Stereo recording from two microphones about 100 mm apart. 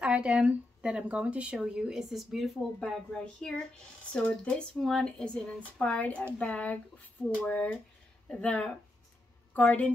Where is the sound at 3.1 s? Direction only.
10° left (ahead or behind).